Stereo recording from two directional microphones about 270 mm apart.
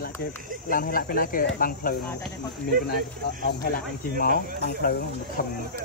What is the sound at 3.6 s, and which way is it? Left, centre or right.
Speech, left.